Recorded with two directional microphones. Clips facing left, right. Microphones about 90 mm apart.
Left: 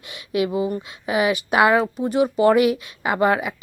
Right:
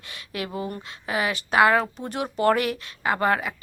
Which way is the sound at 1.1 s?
15° left (ahead or behind).